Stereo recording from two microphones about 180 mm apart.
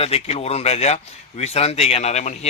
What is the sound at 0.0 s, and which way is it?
A man's voice, 35° left (ahead or behind).